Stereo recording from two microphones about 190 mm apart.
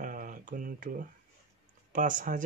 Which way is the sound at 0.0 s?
45° right (ahead or behind).